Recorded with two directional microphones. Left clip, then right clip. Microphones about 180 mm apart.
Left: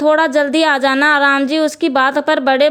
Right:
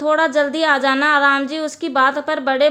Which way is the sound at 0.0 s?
35° left (ahead or behind).